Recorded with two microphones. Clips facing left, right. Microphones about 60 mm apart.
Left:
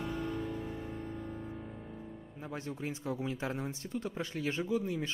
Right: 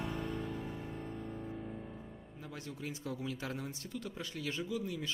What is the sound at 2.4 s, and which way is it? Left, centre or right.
Speech, left.